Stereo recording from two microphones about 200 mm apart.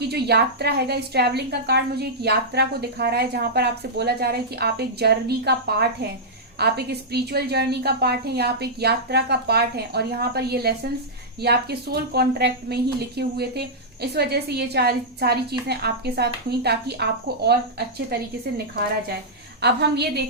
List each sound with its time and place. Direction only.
0.1 s a woman's voice: 55° right (ahead or behind)
19.6 s a woman's voice: 55° right (ahead or behind)